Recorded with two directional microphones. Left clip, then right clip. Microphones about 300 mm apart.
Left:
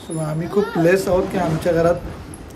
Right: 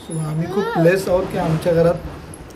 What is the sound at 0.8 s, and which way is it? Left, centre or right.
A man's voice, centre.